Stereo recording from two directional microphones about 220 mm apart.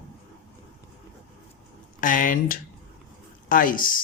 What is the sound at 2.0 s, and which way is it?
Speech, 35° left (ahead or behind).